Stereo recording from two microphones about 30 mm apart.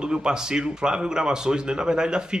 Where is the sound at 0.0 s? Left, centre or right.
Right.